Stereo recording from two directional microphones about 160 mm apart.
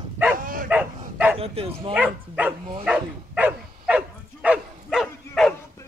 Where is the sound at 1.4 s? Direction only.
35° right (ahead or behind).